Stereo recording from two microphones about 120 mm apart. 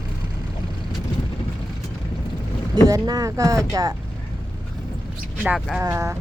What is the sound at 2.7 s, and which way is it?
Speech, 35° right (ahead or behind).